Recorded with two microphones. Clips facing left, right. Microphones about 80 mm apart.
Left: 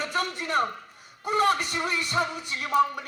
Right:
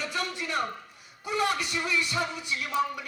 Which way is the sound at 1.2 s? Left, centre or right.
Left.